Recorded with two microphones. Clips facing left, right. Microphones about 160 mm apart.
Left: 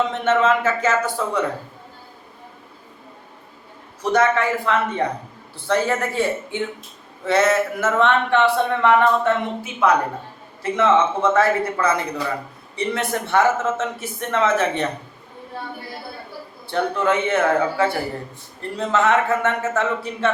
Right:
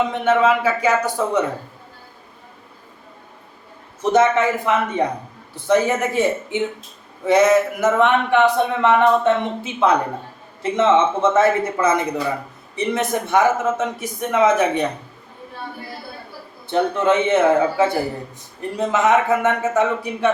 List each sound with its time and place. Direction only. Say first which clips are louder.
0.1 s speech: right 1 dB; 10° right (ahead or behind)
4.0 s a man's voice: right 3 dB; 20° right (ahead or behind)
16.6 s a man's voice: right 3 dB; 20° right (ahead or behind)